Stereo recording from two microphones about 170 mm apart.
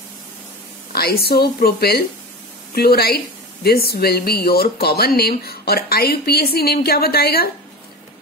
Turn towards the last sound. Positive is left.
turn(degrees=65)  # may be behind; listen again after turning